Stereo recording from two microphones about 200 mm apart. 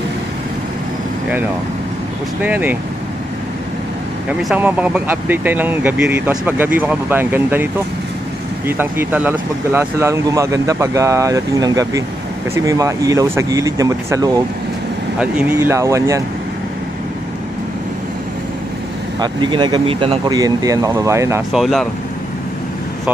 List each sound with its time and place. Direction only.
2.4 s speech: 10° right (ahead or behind)
4.3 s speech: 5° right (ahead or behind)
8.6 s speech: 10° right (ahead or behind)
19.1 s speech: 20° right (ahead or behind)
21.5 s speech: centre (ahead or behind)